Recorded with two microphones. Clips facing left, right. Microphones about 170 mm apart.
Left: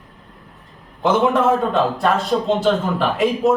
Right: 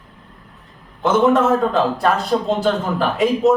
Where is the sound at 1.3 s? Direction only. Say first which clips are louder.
Right 1 dB; centre (ahead or behind).